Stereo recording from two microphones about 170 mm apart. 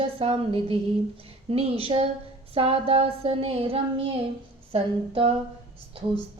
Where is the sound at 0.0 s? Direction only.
35° right (ahead or behind).